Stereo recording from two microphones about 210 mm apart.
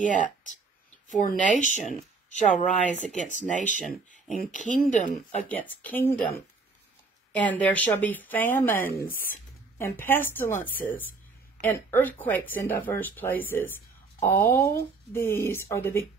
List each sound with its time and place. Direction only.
0.0 s speech: 35° left (ahead or behind)
5.5 s speech: 10° left (ahead or behind)
7.3 s speech: 5° left (ahead or behind)